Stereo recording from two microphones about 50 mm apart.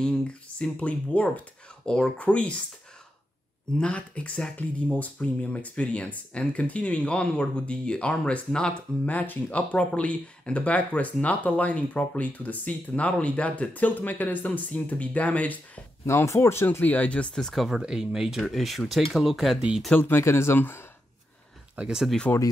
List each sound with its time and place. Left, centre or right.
0.0 s speech: centre
1.9 s speech: centre
2.1 s speech: left
3.8 s speech: left
9.0 s speech: left
16.1 s speech: left
16.8 s speech: left
17.6 s speech: centre
20.0 s speech: left
20.5 s speech: left
21.8 s speech: right
22.3 s speech: left